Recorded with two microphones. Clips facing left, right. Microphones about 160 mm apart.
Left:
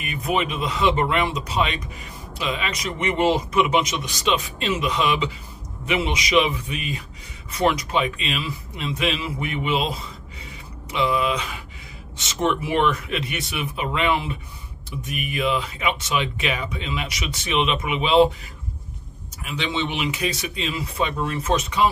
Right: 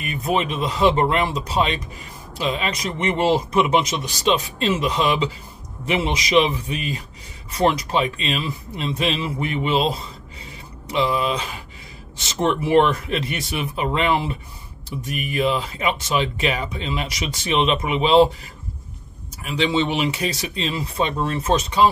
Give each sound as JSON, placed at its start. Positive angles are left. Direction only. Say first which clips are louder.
{"t": 0.0, "sound": "speech", "louder": "right 2 dB", "side_deg": -35}
{"t": 19.4, "sound": "speech", "louder": "right 6 dB", "side_deg": -35}